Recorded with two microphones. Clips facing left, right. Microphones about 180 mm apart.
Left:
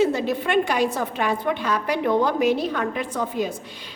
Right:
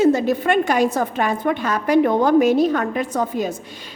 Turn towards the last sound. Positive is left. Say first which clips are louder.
# right 4 dB
turn(degrees=-45)  # may be behind; listen again after turning